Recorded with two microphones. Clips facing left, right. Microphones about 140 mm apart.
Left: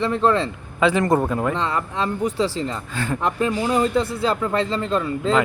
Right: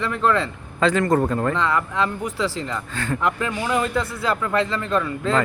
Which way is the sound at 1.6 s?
30° left (ahead or behind).